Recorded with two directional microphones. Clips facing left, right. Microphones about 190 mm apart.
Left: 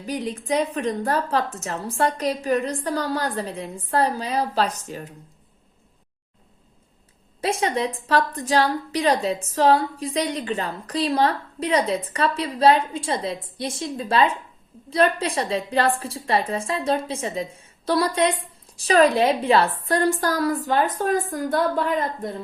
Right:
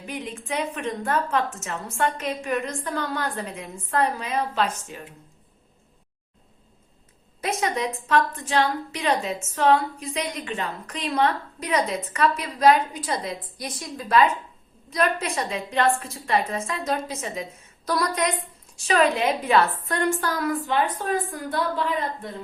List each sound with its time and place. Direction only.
0.0 s a woman's voice: 40° left (ahead or behind)
7.4 s a woman's voice: 30° left (ahead or behind)